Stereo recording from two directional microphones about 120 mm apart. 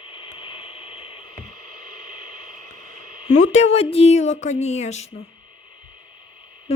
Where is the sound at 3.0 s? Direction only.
70° left (ahead or behind).